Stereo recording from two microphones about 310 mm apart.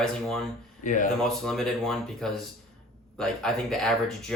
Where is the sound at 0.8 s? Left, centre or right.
Left.